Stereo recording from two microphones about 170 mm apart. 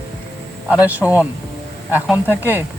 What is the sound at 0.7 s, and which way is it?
Speech, 10° right (ahead or behind).